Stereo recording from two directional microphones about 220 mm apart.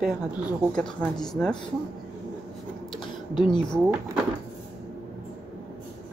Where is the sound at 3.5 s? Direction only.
5° left (ahead or behind).